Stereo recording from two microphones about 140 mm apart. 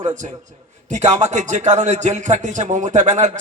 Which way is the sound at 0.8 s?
55° right (ahead or behind).